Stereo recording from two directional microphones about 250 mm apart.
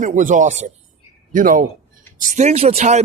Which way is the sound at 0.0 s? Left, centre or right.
Right.